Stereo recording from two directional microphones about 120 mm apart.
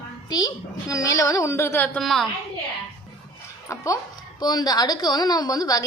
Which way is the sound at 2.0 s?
Centre (ahead or behind).